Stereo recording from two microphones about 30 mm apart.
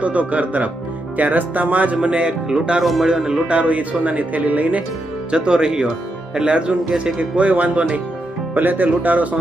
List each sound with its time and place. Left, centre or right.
0.0 s speech: right
1.1 s speech: right
2.0 s speech: right
2.5 s speech: right
2.8 s speech: centre
3.4 s speech: right
5.3 s speech: right
7.0 s speech: right
8.5 s speech: right